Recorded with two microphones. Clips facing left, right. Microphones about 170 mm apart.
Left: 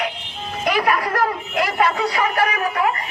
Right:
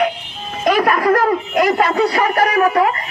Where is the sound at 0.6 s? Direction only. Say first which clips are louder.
Right 5 dB; 45° right (ahead or behind).